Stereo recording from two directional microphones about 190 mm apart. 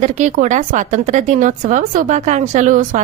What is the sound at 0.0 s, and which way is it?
Speech, 40° right (ahead or behind).